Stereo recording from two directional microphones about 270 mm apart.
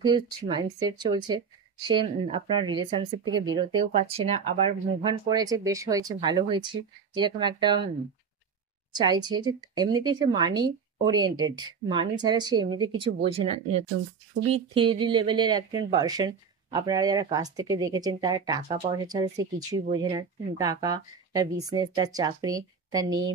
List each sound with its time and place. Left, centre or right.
0.0 s speech: centre
8.9 s speech: centre